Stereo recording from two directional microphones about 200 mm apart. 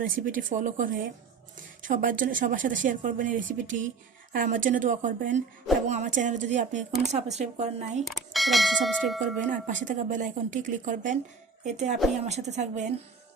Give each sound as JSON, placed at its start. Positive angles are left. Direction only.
{"t": 0.0, "sound": "speech", "side_deg": -40}
{"t": 8.0, "sound": "speech", "side_deg": 0}
{"t": 9.5, "sound": "speech", "side_deg": -40}